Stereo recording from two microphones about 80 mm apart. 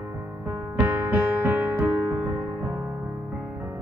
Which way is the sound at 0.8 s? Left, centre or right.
Right.